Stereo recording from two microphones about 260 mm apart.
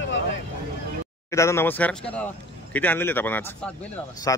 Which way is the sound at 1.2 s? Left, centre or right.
Centre.